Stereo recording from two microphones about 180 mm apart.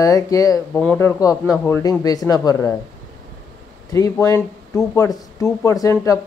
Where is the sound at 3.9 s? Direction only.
20° left (ahead or behind).